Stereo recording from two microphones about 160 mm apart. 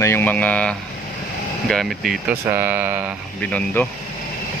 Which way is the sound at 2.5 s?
15° right (ahead or behind).